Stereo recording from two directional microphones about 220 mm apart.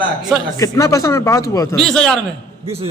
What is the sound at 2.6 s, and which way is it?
Speech, 25° right (ahead or behind).